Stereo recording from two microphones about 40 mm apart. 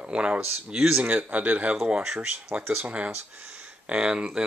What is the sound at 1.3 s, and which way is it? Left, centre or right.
Speech, right.